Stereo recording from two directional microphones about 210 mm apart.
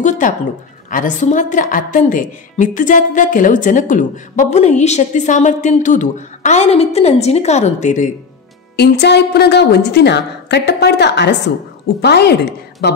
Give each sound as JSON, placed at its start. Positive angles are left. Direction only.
{"t": 0.2, "sound": "a woman's voice", "side_deg": 40}
{"t": 8.7, "sound": "a woman's voice", "side_deg": 50}